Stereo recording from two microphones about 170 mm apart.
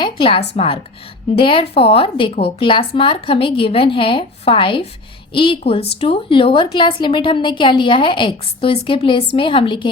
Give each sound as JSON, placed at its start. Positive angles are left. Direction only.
{"t": 0.0, "sound": "a woman's voice", "side_deg": 30}